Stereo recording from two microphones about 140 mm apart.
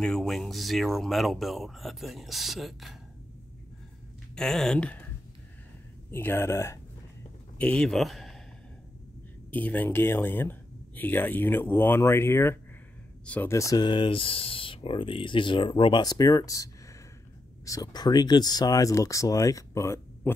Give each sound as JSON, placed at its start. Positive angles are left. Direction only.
{"t": 0.0, "sound": "speech", "side_deg": 5}
{"t": 4.4, "sound": "speech", "side_deg": 5}
{"t": 6.1, "sound": "speech", "side_deg": 15}
{"t": 7.5, "sound": "speech", "side_deg": 5}
{"t": 9.5, "sound": "speech", "side_deg": 10}